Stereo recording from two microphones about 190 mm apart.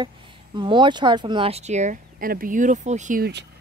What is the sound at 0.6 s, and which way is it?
Speech, 25° right (ahead or behind).